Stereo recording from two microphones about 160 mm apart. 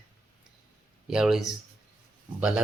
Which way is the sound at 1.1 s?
5° right (ahead or behind).